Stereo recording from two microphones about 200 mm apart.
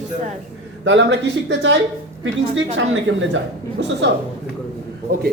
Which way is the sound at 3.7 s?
60° right (ahead or behind).